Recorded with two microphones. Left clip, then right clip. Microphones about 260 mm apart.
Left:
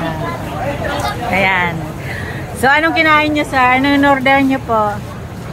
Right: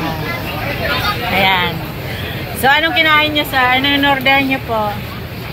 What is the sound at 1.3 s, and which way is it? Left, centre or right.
Speech, centre.